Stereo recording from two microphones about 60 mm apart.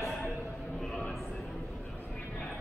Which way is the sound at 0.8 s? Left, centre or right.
Centre.